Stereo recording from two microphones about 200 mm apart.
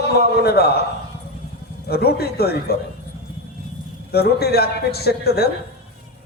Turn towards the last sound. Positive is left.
turn(degrees=55)  # may be behind; listen again after turning